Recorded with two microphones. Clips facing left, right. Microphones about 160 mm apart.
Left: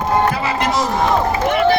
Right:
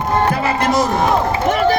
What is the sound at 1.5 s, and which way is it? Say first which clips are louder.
Run: even; 40° right (ahead or behind).